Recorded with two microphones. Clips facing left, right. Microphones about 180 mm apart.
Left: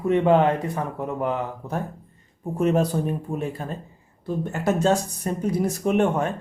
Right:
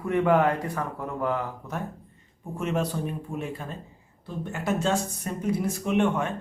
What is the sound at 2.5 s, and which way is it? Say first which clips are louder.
Speech: left 7 dB; 40° left (ahead or behind).